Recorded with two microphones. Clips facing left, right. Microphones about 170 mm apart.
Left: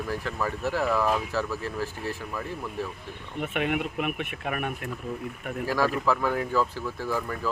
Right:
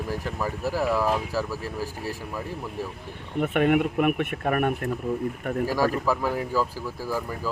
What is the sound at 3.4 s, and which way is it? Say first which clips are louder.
Speech: right 7 dB; 45° right (ahead or behind).